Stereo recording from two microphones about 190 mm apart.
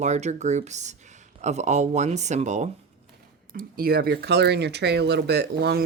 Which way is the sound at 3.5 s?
50° right (ahead or behind).